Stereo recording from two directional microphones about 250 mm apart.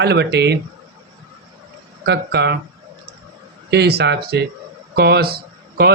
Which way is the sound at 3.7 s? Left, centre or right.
Right.